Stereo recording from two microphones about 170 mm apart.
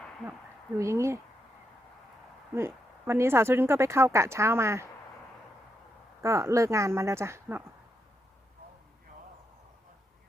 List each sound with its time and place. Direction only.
0.8 s speech: 15° right (ahead or behind)
2.6 s speech: 15° right (ahead or behind)
6.2 s speech: 20° right (ahead or behind)